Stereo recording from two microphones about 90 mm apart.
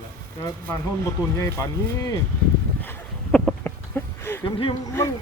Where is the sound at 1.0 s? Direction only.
35° left (ahead or behind).